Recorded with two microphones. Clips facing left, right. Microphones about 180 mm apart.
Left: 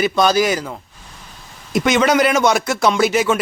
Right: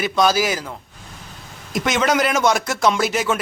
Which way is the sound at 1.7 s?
Centre (ahead or behind).